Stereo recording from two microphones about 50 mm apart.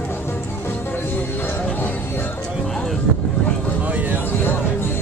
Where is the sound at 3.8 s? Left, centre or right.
Right.